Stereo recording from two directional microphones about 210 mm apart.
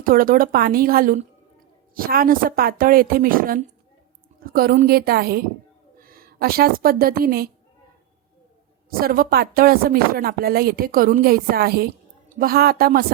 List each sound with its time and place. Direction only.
0.0 s a woman's voice: 40° right (ahead or behind)
8.9 s speech: 45° right (ahead or behind)